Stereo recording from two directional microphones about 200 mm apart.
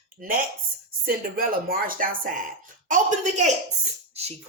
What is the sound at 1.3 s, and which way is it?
Speech, 45° right (ahead or behind).